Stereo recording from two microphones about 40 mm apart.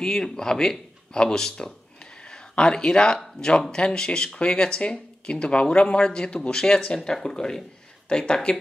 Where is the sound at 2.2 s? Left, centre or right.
Left.